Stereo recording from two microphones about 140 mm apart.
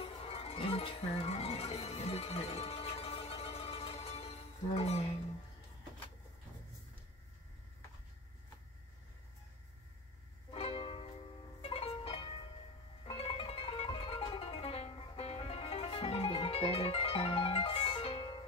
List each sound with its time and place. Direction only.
0.0 s music: 45° left (ahead or behind)
10.5 s music: 45° left (ahead or behind)